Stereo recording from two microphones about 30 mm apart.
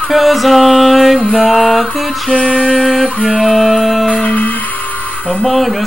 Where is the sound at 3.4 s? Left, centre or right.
Centre.